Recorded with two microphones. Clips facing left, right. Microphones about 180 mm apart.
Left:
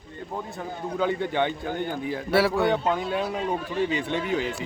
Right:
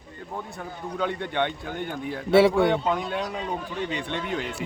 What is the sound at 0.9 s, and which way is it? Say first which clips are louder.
Speech: left 2 dB; 5° left (ahead or behind).